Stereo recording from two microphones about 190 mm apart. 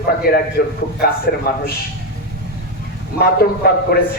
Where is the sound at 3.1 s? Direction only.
55° left (ahead or behind).